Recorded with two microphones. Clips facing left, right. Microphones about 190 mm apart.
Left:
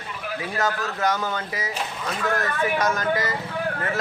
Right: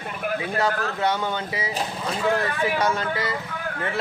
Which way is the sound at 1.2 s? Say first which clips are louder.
Right 1 dB; 20° right (ahead or behind).